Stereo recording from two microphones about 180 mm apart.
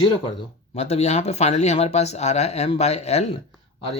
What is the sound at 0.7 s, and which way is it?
Speech, 35° left (ahead or behind).